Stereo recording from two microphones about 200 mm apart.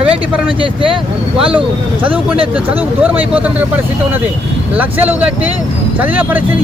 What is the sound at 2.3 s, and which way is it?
Speech, 25° right (ahead or behind).